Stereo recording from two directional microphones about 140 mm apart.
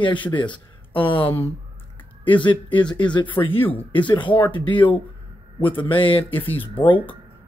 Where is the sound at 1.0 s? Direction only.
35° left (ahead or behind).